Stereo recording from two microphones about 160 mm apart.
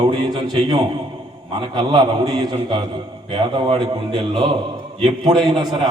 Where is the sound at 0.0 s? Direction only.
40° right (ahead or behind).